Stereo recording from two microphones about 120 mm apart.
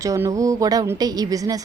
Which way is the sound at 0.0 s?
25° right (ahead or behind).